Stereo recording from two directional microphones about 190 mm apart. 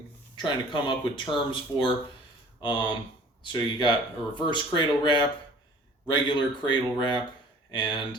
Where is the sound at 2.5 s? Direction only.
25° left (ahead or behind).